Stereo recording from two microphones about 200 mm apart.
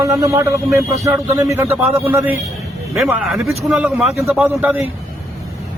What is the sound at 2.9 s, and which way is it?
Speech, 5° right (ahead or behind).